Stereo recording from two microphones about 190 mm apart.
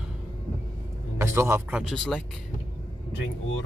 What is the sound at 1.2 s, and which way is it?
Speech, 15° right (ahead or behind).